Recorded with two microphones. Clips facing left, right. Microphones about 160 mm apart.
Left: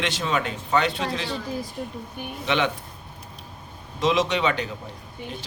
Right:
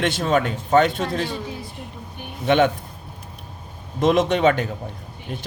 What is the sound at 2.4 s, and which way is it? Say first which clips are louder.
Speech: right 7 dB; 50° right (ahead or behind).